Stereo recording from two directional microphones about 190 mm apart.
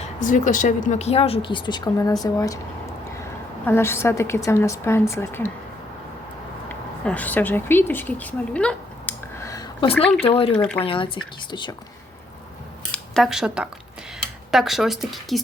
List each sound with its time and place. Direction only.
0.0 s speech: 40° left (ahead or behind); by 2.6 s 20° left (ahead or behind)
3.7 s a woman's voice: 15° left (ahead or behind)
6.7 s speech: 10° left (ahead or behind)
10.2 s speech: 30° left (ahead or behind)
12.9 s a sound: centre (ahead or behind)
14.5 s speech: centre (ahead or behind)